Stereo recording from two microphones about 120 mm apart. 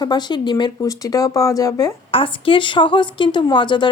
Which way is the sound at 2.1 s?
45° left (ahead or behind).